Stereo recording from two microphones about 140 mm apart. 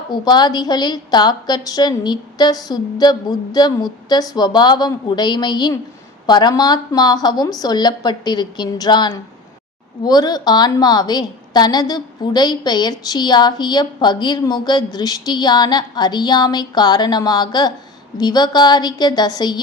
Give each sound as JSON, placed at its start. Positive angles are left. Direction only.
{"t": 0.1, "sound": "a woman's voice", "side_deg": 30}